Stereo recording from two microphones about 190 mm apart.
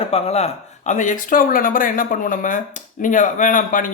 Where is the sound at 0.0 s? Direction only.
30° left (ahead or behind).